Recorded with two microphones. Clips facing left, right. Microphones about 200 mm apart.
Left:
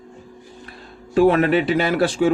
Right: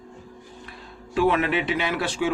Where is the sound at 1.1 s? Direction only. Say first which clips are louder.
Left 6 dB; 40° left (ahead or behind).